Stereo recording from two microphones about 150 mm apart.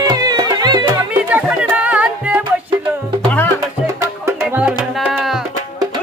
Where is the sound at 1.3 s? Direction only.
10° right (ahead or behind).